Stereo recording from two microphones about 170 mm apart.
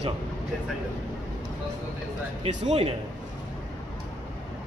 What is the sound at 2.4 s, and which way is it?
Speech, 40° right (ahead or behind).